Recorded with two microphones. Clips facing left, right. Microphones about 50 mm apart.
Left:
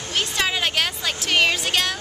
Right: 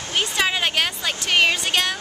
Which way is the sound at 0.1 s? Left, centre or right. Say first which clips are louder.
Right 2 dB; centre.